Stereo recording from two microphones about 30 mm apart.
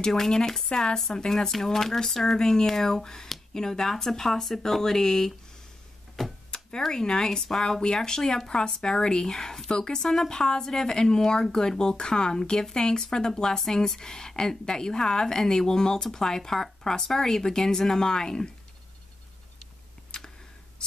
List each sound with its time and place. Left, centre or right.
0.0 s speech: centre
2.3 s speech: left
6.2 s a sound: centre
6.9 s speech: left
7.6 s speech: left
10.0 s speech: centre
10.3 s speech: left
20.1 s tick: left